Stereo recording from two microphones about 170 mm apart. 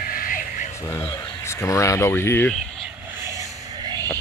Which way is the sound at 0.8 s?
20° left (ahead or behind).